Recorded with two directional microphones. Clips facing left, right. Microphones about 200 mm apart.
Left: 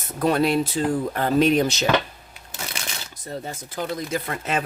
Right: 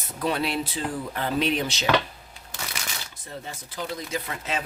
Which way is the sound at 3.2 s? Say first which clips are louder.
Left 7 dB; 45° left (ahead or behind).